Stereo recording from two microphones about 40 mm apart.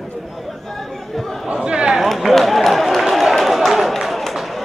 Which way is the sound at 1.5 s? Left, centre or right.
Right.